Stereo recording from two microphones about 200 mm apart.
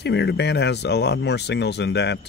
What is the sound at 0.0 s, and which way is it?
Speech, 60° left (ahead or behind).